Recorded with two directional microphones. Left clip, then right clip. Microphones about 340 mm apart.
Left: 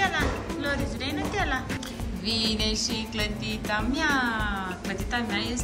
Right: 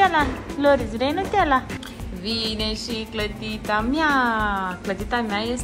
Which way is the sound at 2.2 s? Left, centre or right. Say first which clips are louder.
Right 1 dB; centre.